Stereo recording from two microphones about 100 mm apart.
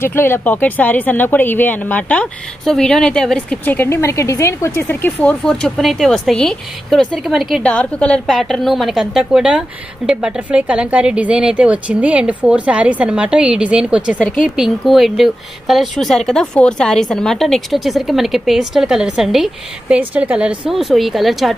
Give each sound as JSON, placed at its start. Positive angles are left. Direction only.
{"t": 0.0, "sound": "a woman's voice", "side_deg": 25}
{"t": 2.6, "sound": "a woman's voice", "side_deg": 5}
{"t": 7.6, "sound": "a woman's voice", "side_deg": 10}